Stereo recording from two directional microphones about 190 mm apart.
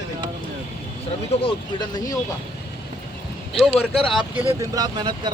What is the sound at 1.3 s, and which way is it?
Speech, 30° left (ahead or behind).